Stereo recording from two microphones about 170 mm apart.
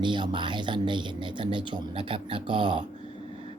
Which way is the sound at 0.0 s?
25° right (ahead or behind).